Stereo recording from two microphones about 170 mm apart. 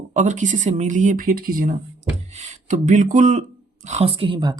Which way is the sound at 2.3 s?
45° right (ahead or behind).